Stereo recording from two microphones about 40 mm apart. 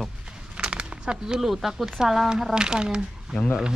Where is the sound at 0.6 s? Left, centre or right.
Right.